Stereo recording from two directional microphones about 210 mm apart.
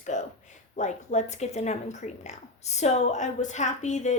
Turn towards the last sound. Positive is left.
turn(degrees=35)  # may be behind; listen again after turning